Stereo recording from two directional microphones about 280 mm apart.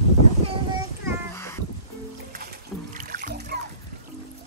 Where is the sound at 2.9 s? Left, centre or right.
Right.